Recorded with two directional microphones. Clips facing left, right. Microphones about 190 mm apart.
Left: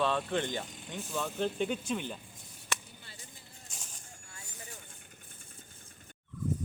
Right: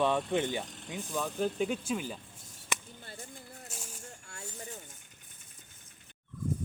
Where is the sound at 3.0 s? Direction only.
50° right (ahead or behind).